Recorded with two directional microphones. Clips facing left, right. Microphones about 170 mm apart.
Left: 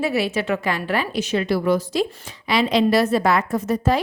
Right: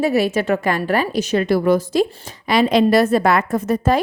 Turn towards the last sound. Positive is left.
turn(degrees=-50)  # may be behind; listen again after turning